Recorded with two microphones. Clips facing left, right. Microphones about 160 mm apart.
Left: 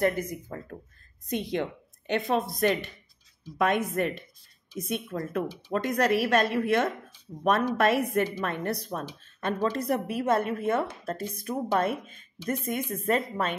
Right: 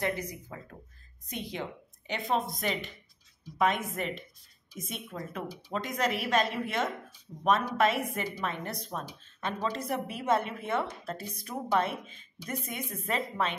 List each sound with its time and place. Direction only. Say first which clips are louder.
0.0 s a woman's voice: left 6 dB; 50° left (ahead or behind)
1.3 s a woman's voice: left 8 dB; 65° left (ahead or behind); by 13.6 s 45° left (ahead or behind)